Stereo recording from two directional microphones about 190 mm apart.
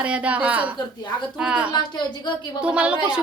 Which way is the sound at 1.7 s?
25° left (ahead or behind).